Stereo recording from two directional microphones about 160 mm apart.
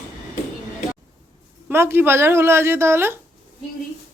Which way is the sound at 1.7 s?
15° right (ahead or behind).